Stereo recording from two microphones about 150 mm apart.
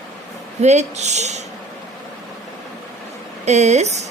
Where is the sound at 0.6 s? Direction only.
50° right (ahead or behind).